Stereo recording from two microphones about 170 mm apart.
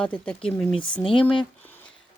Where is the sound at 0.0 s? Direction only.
5° left (ahead or behind).